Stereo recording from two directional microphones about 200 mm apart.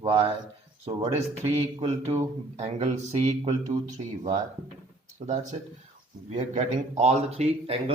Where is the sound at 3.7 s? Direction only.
15° right (ahead or behind).